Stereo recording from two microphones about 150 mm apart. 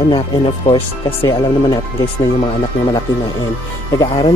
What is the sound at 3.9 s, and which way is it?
Speech, 30° left (ahead or behind).